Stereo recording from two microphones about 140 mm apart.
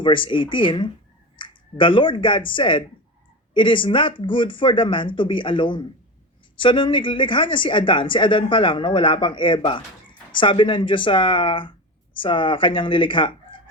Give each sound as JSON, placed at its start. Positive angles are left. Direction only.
{"t": 0.0, "sound": "speech", "side_deg": 35}